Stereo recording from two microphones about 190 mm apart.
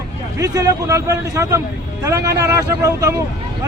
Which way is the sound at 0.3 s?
15° right (ahead or behind).